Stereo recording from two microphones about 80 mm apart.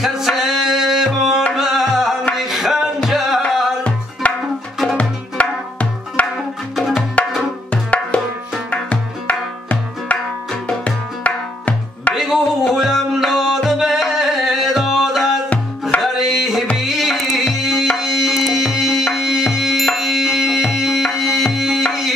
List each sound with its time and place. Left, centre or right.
0.0 s music: centre
1.5 s tabla: centre
2.3 s music: centre
4.2 s music: centre
6.7 s music: centre
8.6 s tabla: centre
12.1 s music: centre
16.0 s tabla: centre
16.7 s music: centre
20.0 s tabla: centre
21.8 s music: centre